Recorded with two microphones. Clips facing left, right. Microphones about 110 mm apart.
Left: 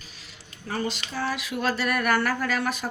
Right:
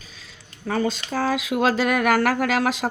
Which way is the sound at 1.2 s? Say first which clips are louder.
Right 7 dB; 90° right.